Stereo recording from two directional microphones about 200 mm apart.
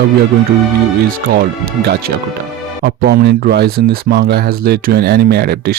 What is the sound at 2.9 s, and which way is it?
Speech, 50° right (ahead or behind).